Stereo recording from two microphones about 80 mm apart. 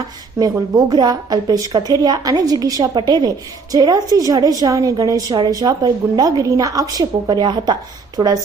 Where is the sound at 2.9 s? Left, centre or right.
Right.